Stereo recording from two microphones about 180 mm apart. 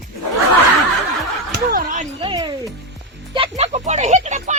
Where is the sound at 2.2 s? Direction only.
25° right (ahead or behind); by 4.6 s 40° right (ahead or behind).